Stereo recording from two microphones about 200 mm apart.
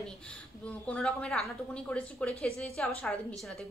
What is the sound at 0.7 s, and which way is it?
A woman's voice, 5° left (ahead or behind).